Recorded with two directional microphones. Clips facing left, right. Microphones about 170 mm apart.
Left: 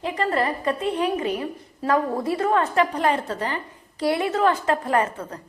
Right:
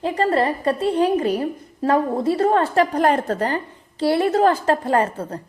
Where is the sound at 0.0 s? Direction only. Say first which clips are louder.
Right 4 dB; 35° right (ahead or behind).